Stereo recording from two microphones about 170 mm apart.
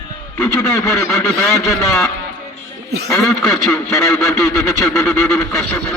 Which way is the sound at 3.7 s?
15° left (ahead or behind).